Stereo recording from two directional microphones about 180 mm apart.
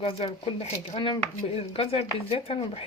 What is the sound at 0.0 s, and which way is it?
Speech, 30° left (ahead or behind).